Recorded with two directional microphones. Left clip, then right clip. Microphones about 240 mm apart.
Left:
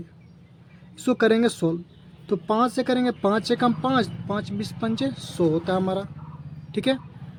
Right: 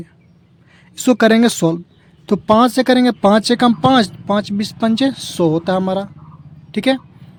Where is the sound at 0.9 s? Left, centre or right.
Right.